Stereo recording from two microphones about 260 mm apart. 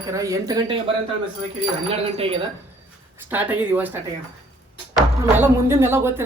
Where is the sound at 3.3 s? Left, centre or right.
Centre.